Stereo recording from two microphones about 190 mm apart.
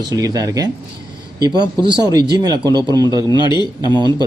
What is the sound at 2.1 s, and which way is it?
Speech, 20° right (ahead or behind).